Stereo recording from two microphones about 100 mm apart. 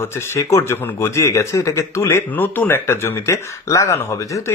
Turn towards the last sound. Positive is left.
turn(degrees=35)  # may be behind; listen again after turning